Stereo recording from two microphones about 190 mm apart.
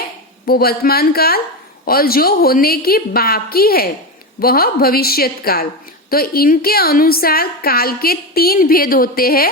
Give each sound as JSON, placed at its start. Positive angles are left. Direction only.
{"t": 0.4, "sound": "a woman's voice", "side_deg": 55}